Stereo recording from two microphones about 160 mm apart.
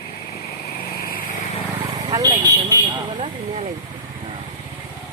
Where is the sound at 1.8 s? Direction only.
25° right (ahead or behind).